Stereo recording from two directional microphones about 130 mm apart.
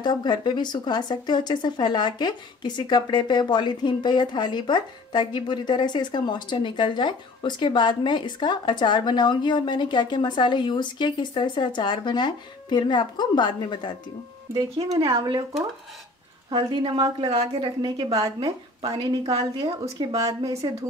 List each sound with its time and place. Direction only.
0.0 s speech: 35° left (ahead or behind)
14.5 s speech: 35° right (ahead or behind)
15.1 s speech: 40° right (ahead or behind)
16.4 s speech: 35° right (ahead or behind)
17.3 s a woman's voice: 55° right (ahead or behind)
17.8 s speech: 40° right (ahead or behind)